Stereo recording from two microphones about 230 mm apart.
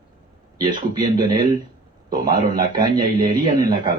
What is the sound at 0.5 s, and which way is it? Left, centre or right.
Speech, centre.